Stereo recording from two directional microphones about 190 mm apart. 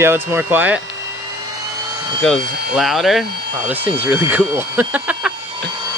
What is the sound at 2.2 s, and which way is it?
Speech, centre (ahead or behind).